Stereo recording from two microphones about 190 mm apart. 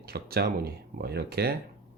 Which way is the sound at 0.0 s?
55° right (ahead or behind).